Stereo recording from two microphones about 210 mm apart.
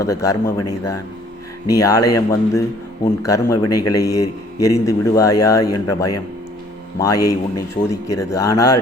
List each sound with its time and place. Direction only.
0.0 s a man's voice: 15° left (ahead or behind)
1.6 s a man's voice: 15° left (ahead or behind)